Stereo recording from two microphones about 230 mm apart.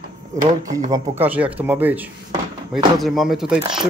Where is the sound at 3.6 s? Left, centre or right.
Centre.